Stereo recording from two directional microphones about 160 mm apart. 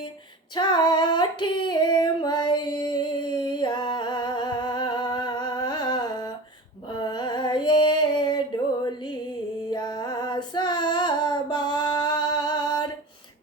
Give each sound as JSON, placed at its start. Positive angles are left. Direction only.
{"t": 0.5, "sound": "female singing", "side_deg": 25}
{"t": 7.0, "sound": "music", "side_deg": 30}
{"t": 9.6, "sound": "female singing", "side_deg": 25}